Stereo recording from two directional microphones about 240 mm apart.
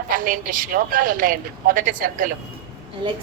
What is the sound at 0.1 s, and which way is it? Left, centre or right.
A woman's voice, right.